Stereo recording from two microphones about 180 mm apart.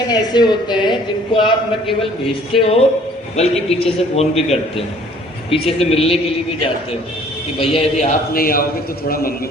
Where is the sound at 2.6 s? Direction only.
35° left (ahead or behind).